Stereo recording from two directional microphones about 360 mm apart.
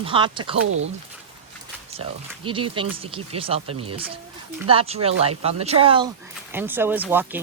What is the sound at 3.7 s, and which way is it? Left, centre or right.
Speech, right.